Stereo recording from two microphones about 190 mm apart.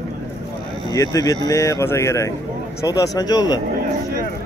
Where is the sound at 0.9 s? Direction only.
20° left (ahead or behind).